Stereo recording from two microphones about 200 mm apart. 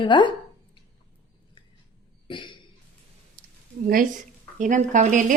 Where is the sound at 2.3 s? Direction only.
25° left (ahead or behind).